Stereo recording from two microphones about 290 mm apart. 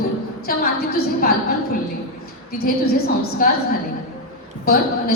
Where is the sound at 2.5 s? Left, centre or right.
Left.